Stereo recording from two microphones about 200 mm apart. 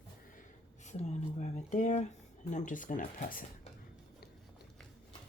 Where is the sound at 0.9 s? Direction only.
35° left (ahead or behind).